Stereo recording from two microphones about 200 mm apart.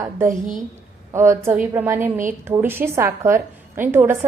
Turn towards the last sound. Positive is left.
turn(degrees=-10)  # may be behind; listen again after turning